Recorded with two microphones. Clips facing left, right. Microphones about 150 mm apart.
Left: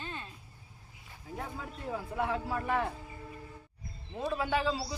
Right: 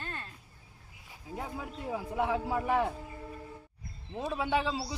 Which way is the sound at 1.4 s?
15° right (ahead or behind).